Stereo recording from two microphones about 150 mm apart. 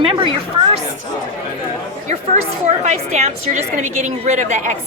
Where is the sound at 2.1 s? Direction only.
50° right (ahead or behind).